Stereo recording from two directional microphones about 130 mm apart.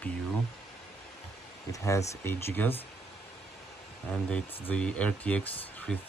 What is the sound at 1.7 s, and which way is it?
Speech, 25° left (ahead or behind).